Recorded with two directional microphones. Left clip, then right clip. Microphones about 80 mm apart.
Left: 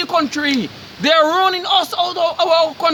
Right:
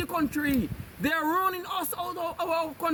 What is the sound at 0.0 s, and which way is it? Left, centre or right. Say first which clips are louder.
A man's voice: left 12 dB; left.